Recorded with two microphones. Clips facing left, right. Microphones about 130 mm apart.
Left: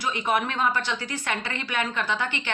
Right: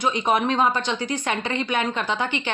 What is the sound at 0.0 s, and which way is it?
A woman's voice, 20° right (ahead or behind).